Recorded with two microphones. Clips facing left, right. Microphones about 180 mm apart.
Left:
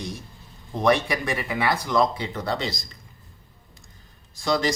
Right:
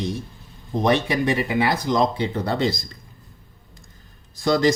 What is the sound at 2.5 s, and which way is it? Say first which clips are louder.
Speech: right 5 dB; 55° right (ahead or behind).